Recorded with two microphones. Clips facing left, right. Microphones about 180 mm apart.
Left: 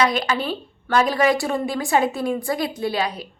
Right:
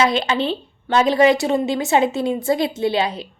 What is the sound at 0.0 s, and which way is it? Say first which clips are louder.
A woman's voice: right 2 dB; 25° right (ahead or behind).